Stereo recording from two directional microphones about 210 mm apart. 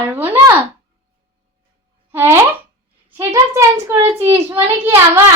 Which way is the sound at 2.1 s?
10° right (ahead or behind).